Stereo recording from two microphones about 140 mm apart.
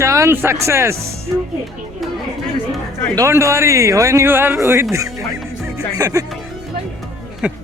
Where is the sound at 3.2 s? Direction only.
20° right (ahead or behind).